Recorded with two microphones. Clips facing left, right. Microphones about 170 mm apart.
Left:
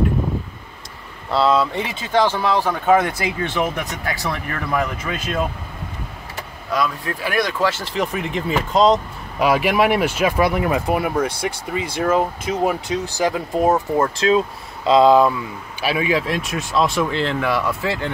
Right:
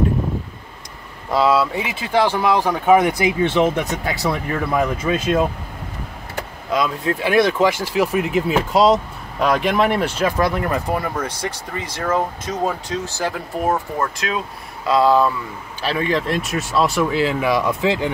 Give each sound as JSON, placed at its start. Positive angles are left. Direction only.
{"t": 1.3, "sound": "speech", "side_deg": -10}
{"t": 6.7, "sound": "speech", "side_deg": -20}
{"t": 9.4, "sound": "speech", "side_deg": 5}